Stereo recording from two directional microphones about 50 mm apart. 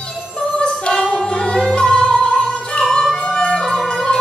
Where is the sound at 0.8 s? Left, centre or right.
Centre.